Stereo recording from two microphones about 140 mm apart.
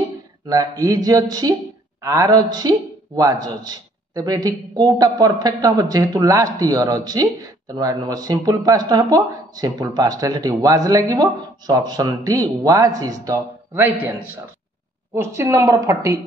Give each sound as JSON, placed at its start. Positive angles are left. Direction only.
{"t": 0.5, "sound": "a man's voice", "side_deg": -25}